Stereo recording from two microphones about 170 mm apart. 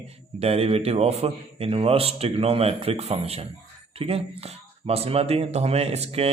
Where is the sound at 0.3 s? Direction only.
35° right (ahead or behind).